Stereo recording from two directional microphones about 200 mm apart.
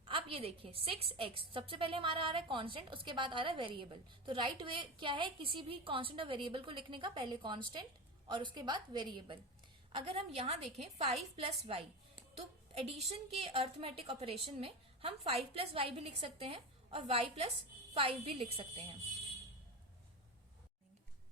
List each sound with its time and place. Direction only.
0.1 s a woman's voice: 25° right (ahead or behind)